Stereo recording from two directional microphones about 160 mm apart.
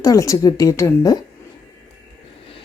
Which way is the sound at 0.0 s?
20° left (ahead or behind).